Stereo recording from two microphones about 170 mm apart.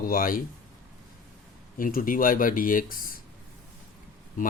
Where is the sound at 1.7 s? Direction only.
55° left (ahead or behind).